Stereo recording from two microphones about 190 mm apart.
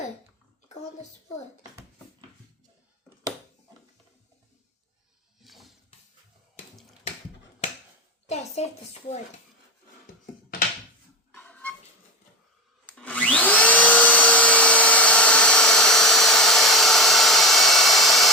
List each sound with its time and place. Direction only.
5.4 s a sound: centre (ahead or behind)
8.6 s speech: 35° left (ahead or behind)
11.3 s music: 5° left (ahead or behind)
12.8 s vacuum cleaner: 10° left (ahead or behind)